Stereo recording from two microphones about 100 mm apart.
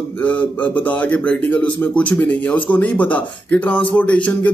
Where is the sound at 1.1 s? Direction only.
15° left (ahead or behind).